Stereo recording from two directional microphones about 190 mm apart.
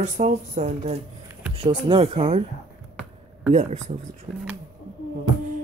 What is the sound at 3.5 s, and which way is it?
Speech, 35° right (ahead or behind).